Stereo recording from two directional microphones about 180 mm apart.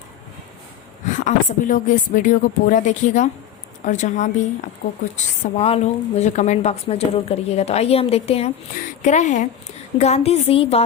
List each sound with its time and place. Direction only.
1.0 s a woman's voice: 45° left (ahead or behind)